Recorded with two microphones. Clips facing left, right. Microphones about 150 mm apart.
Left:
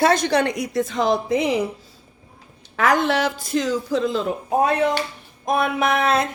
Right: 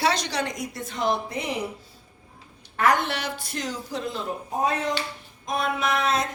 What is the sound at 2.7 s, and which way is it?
Speech, 90° left.